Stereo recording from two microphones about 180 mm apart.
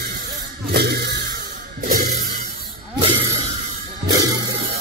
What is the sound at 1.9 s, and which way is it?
Music, 50° right (ahead or behind).